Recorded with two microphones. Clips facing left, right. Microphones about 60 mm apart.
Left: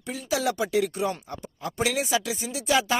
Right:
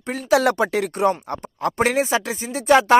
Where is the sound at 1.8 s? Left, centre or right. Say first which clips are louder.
Right 5 dB; right.